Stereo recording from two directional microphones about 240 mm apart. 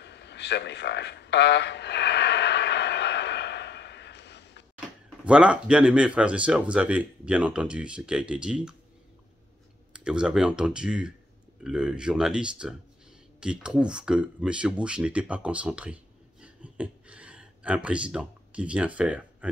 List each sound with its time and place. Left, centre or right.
0.0 s a sound: left
5.2 s speech: centre
9.9 s speech: centre